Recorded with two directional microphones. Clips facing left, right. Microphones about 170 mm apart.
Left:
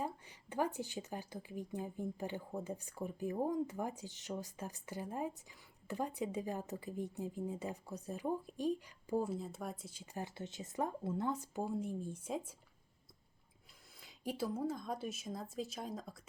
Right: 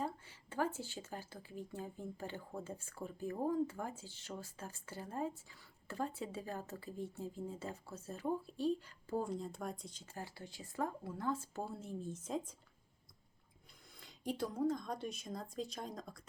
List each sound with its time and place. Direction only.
0.0 s a woman's voice: 15° left (ahead or behind)
14.0 s speech: 5° left (ahead or behind)